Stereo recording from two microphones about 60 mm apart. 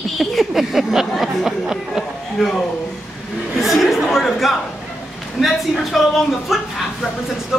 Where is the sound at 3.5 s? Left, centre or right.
Centre.